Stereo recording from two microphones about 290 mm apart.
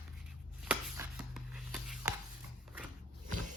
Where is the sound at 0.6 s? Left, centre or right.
Centre.